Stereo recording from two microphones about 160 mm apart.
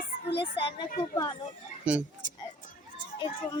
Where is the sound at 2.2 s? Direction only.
55° right (ahead or behind).